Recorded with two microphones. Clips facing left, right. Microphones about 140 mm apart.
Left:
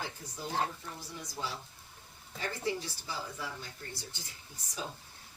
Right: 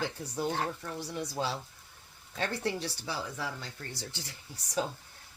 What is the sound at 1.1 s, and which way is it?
Speech, 65° right (ahead or behind).